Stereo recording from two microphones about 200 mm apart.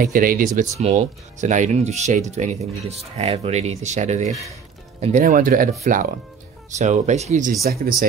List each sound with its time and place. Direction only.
0.0 s speech: 45° right (ahead or behind)
0.6 s speech: 35° right (ahead or behind)
7.6 s speech: 45° right (ahead or behind)